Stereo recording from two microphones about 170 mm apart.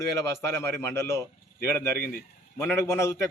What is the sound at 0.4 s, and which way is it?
A man's voice, 15° left (ahead or behind).